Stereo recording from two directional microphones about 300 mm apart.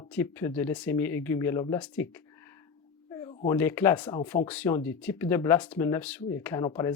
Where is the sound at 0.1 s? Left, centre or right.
Centre.